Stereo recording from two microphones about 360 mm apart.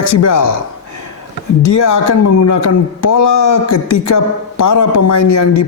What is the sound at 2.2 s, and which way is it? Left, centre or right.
Speech, left.